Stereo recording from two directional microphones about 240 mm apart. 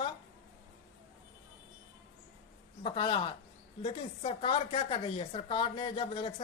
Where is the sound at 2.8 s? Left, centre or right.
Centre.